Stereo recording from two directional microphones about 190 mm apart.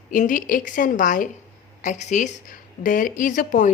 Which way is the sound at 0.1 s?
45° left (ahead or behind).